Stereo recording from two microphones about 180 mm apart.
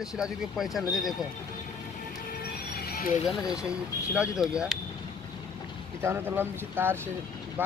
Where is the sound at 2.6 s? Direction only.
60° left (ahead or behind).